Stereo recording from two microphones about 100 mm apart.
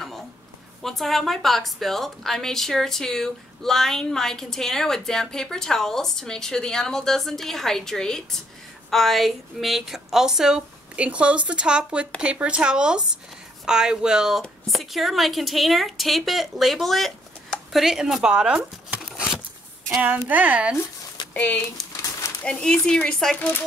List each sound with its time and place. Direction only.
0.8 s a woman's voice: centre (ahead or behind); by 20.7 s 15° right (ahead or behind)
21.3 s speech: 20° left (ahead or behind)